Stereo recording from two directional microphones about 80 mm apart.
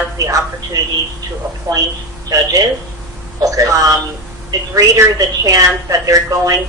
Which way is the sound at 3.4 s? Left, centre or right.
Right.